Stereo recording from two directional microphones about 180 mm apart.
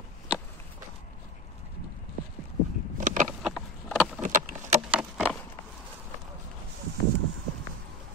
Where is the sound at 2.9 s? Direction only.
45° right (ahead or behind).